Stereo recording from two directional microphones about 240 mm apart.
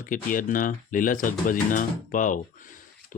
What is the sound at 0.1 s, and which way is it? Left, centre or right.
Speech, left.